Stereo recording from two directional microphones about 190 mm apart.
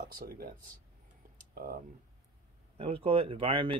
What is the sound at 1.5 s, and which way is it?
Speech, 50° right (ahead or behind).